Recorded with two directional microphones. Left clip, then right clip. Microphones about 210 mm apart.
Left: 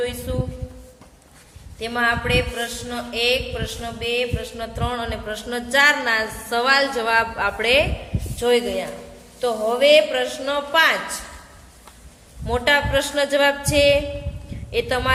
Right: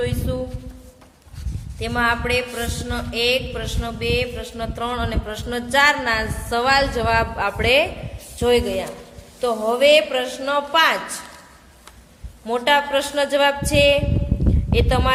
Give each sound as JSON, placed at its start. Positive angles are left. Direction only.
{"t": 0.0, "sound": "speech", "side_deg": -20}
{"t": 1.8, "sound": "a woman's voice", "side_deg": -20}
{"t": 12.5, "sound": "speech", "side_deg": -15}